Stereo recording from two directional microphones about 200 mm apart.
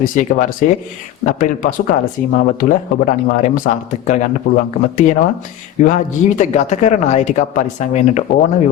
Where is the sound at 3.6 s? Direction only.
45° left (ahead or behind).